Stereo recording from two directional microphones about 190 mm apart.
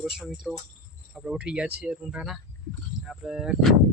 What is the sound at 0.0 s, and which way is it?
A man's voice, centre (ahead or behind).